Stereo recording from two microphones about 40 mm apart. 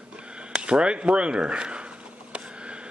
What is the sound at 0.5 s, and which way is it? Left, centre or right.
A man's voice, right.